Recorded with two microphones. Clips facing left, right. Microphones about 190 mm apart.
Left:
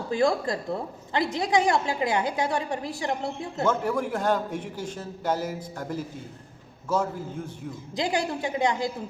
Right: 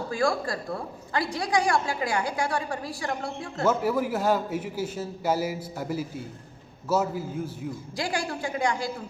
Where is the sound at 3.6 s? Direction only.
5° right (ahead or behind).